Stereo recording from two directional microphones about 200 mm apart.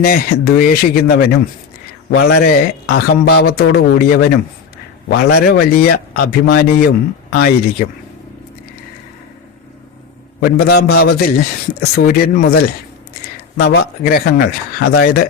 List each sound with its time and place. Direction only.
0.0 s a man's voice: 50° left (ahead or behind)
10.6 s a man's voice: 55° left (ahead or behind)